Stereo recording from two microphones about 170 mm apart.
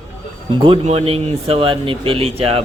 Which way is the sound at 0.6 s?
35° right (ahead or behind).